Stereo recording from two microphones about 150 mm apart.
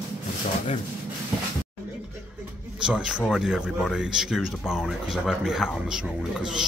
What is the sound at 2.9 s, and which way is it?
Speech, 5° right (ahead or behind).